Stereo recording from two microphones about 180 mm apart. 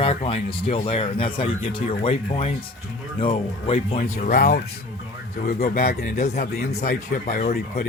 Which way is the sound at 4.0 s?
50° left (ahead or behind).